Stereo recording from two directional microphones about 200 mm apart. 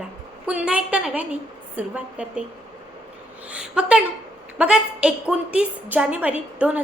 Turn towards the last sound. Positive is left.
turn(degrees=-5)  # may be behind; listen again after turning